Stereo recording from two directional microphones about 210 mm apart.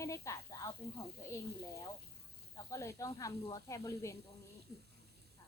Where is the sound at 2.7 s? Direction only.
15° left (ahead or behind).